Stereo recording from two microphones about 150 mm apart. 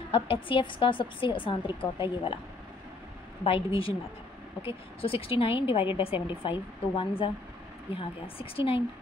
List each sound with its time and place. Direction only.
0.1 s a woman's voice: 35° left (ahead or behind)
3.4 s a woman's voice: 40° left (ahead or behind)